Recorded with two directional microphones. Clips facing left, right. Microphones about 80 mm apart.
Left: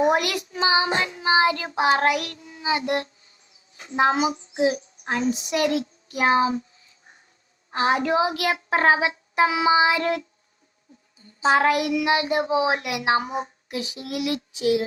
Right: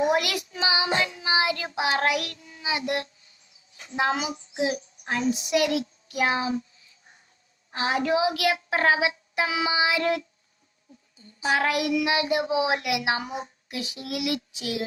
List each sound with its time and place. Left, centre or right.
0.0 s a woman's voice: left
3.8 s child singing: left
7.7 s a woman's voice: left
11.4 s a woman's voice: left